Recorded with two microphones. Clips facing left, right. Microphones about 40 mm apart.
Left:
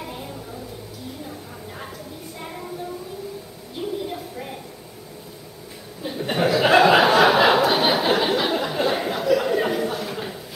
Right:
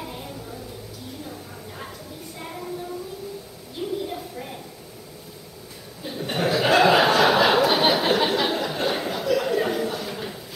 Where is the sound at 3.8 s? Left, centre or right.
Centre.